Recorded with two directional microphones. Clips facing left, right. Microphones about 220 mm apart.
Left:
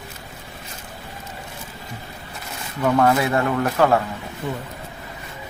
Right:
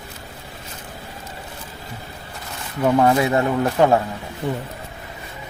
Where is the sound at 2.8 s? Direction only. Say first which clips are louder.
Right 1 dB; 20° right (ahead or behind).